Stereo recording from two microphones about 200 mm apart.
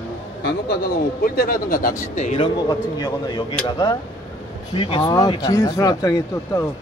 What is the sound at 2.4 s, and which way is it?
A man's voice, 20° left (ahead or behind).